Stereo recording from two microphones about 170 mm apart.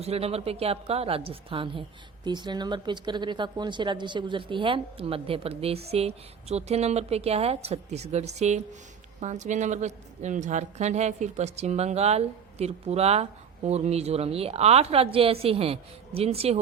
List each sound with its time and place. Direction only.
0.0 s a woman's voice: 35° right (ahead or behind)